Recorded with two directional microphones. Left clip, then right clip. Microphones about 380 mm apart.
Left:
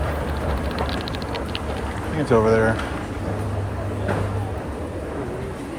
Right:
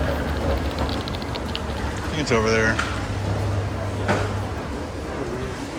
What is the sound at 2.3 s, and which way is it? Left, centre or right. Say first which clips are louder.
Speech: left 3 dB; centre.